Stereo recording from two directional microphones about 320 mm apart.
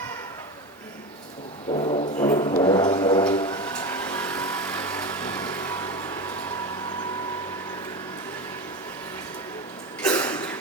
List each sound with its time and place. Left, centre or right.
1.7 s music: centre
3.8 s vehicle: centre
10.0 s a sound: centre